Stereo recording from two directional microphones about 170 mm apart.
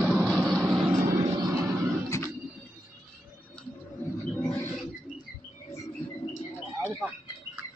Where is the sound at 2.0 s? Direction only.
20° left (ahead or behind).